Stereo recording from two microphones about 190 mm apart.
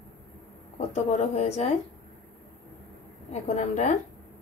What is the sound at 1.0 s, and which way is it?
Speech, 35° left (ahead or behind).